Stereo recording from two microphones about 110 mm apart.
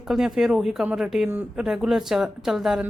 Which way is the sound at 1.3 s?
15° right (ahead or behind).